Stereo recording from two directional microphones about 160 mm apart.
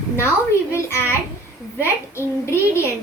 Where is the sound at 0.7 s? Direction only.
15° left (ahead or behind).